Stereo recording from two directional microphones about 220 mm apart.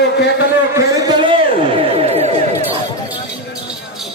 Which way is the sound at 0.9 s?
20° right (ahead or behind).